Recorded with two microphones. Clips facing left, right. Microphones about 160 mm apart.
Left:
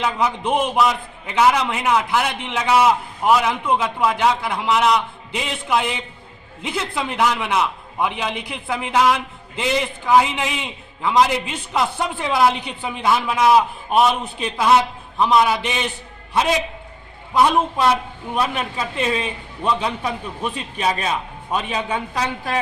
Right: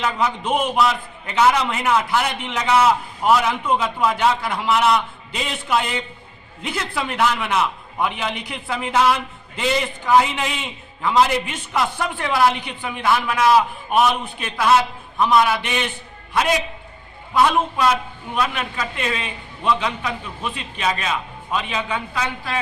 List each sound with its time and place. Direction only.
0.0 s a man's voice: 10° left (ahead or behind)
17.3 s a man's voice: 25° left (ahead or behind); by 22.6 s 40° left (ahead or behind)